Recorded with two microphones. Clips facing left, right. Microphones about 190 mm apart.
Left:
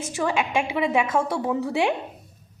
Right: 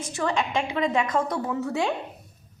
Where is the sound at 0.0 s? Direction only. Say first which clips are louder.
Left 2 dB; 10° left (ahead or behind).